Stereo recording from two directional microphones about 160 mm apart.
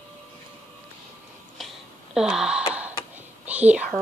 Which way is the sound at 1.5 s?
Centre (ahead or behind).